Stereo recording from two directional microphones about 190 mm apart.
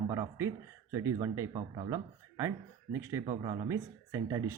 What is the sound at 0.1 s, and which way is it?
Speech, 15° right (ahead or behind).